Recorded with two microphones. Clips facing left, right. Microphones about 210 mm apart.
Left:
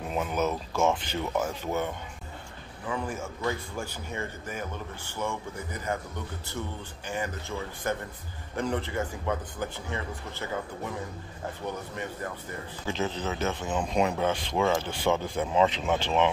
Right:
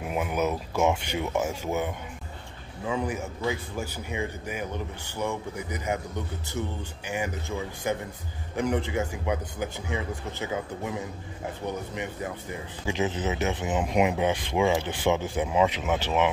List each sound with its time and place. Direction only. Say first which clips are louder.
0.0 s a man's voice: right 1 dB; 10° right (ahead or behind)
11.9 s speech: right 2 dB; 15° right (ahead or behind)